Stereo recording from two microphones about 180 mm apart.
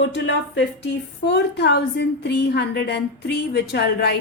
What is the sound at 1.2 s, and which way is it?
A woman's voice, 70° left (ahead or behind).